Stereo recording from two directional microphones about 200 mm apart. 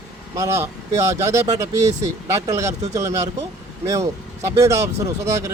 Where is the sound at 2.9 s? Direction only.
15° right (ahead or behind).